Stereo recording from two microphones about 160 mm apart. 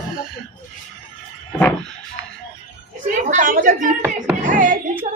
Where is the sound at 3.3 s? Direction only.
55° right (ahead or behind).